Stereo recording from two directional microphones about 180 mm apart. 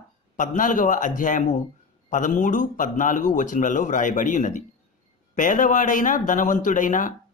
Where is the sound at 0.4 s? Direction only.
45° left (ahead or behind).